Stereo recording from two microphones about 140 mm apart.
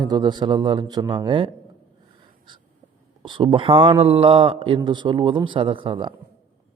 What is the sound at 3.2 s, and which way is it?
A man's voice, 35° right (ahead or behind).